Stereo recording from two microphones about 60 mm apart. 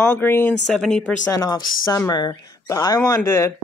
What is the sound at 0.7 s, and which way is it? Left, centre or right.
Speech, centre.